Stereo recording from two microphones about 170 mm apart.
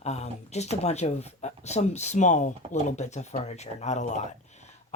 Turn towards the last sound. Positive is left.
turn(degrees=45)  # may be behind; listen again after turning